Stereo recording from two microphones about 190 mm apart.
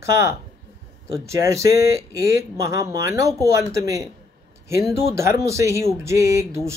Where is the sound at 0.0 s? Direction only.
15° right (ahead or behind).